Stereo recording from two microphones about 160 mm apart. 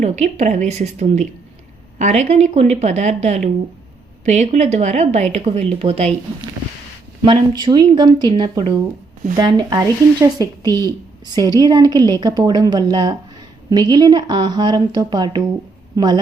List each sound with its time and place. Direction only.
0.0 s speech: 45° right (ahead or behind)
7.2 s speech: 30° right (ahead or behind)